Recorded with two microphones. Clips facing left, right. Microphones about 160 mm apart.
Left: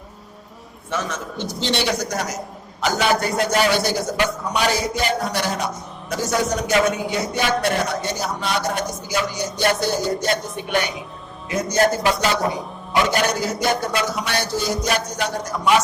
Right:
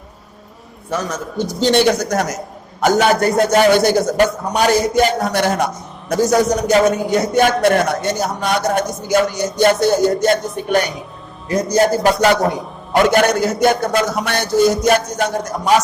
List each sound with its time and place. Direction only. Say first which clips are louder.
0.9 s a man's voice: right 4 dB; 40° right (ahead or behind)
12.0 s a man's voice: right 6 dB; 50° right (ahead or behind)